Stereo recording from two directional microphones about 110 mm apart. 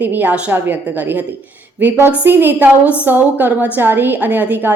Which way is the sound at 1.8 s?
20° right (ahead or behind).